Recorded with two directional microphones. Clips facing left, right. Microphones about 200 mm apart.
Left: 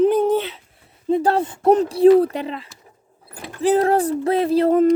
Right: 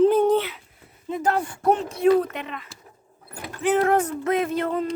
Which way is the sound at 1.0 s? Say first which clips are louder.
Left 6 dB; 30° left (ahead or behind).